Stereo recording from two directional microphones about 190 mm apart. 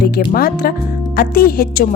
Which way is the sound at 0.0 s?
50° left (ahead or behind).